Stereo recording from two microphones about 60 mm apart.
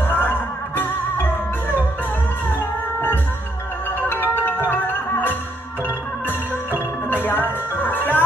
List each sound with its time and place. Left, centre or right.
0.0 s music: left
2.5 s music: left
4.1 s marimba: left
4.6 s music: left